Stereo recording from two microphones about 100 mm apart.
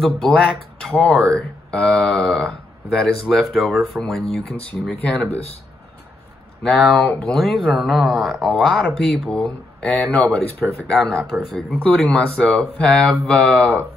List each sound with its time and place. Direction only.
0.0 s speech: 5° left (ahead or behind)
5.3 s speech: 90° left
6.6 s speech: centre (ahead or behind)